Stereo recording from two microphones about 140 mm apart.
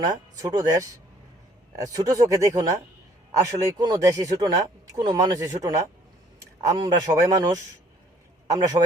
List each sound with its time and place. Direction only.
0.0 s speech: 25° right (ahead or behind)